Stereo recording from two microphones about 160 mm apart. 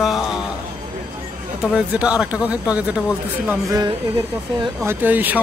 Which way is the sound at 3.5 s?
20° right (ahead or behind).